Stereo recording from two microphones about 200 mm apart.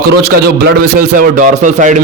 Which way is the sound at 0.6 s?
45° right (ahead or behind).